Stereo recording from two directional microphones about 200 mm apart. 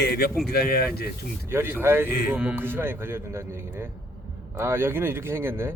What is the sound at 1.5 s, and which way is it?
Speech, 10° right (ahead or behind).